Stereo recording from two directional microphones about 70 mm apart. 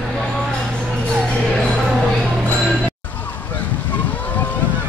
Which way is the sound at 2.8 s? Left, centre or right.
Left.